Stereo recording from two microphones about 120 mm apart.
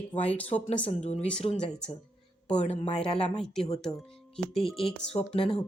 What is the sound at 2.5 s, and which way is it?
Speech, 65° left (ahead or behind).